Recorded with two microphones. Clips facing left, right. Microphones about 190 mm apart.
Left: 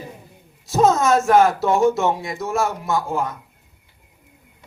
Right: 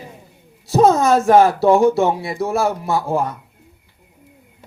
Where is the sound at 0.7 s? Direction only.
35° right (ahead or behind).